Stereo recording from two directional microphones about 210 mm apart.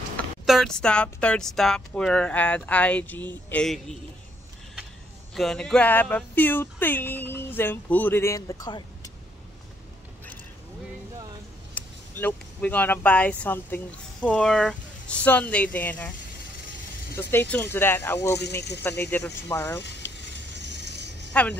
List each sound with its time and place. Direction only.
0.5 s speech: centre (ahead or behind)
5.3 s speech: centre (ahead or behind); by 9.1 s 20° left (ahead or behind)
11.7 s speech: 10° left (ahead or behind)
17.2 s speech: 10° left (ahead or behind)
20.5 s a sound: 55° right (ahead or behind)
21.3 s speech: 5° left (ahead or behind)